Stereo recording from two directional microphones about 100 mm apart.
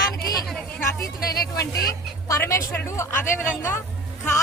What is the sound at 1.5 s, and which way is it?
Speech, 35° left (ahead or behind).